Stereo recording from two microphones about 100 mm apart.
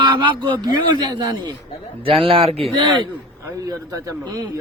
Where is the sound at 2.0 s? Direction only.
65° right (ahead or behind).